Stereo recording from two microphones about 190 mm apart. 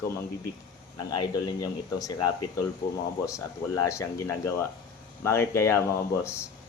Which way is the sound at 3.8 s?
15° left (ahead or behind).